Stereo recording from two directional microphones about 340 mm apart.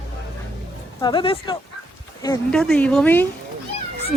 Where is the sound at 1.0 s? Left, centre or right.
Centre.